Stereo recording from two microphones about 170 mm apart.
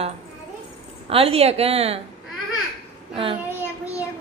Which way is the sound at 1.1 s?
35° right (ahead or behind).